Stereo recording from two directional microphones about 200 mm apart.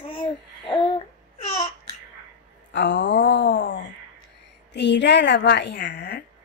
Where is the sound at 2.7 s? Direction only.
65° left (ahead or behind).